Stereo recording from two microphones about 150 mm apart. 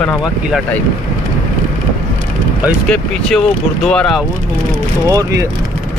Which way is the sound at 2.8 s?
5° left (ahead or behind).